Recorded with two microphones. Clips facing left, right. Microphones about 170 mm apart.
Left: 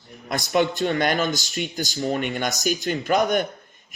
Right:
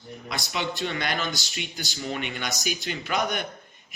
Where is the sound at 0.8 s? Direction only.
45° left (ahead or behind).